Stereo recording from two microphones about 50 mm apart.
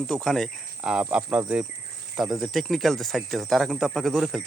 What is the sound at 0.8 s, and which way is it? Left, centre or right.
Speech, centre.